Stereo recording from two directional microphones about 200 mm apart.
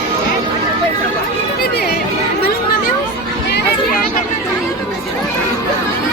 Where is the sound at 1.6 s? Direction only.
50° left (ahead or behind).